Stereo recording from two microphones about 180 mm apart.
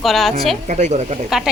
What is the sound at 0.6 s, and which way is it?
Speech, 40° right (ahead or behind).